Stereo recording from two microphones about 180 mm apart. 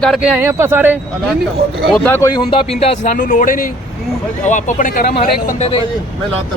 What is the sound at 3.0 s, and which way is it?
Speech, 45° left (ahead or behind).